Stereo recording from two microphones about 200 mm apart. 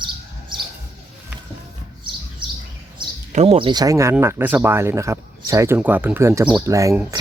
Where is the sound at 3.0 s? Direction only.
20° right (ahead or behind).